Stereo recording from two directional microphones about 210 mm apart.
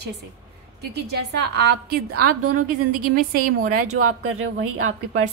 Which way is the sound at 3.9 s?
90° right.